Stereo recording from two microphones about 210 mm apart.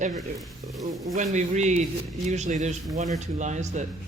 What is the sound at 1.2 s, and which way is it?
Speech, 35° right (ahead or behind).